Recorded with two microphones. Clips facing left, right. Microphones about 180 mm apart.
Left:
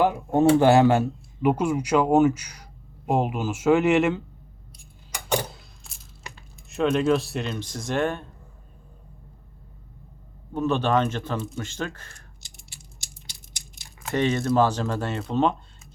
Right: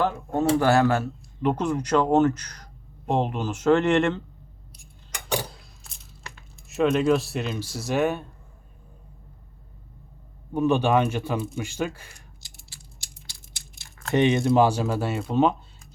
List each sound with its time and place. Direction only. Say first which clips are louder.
0.0 s speech: left 4 dB; 15° left (ahead or behind)
5.4 s a sound: left 2 dB; centre (ahead or behind)
6.7 s speech: right 1 dB; centre (ahead or behind)
10.5 s speech: right 2 dB; 10° right (ahead or behind)
13.2 s scissors: left 1 dB; 20° left (ahead or behind)
14.1 s speech: right 3 dB; 20° right (ahead or behind); by 15.9 s 5° right (ahead or behind)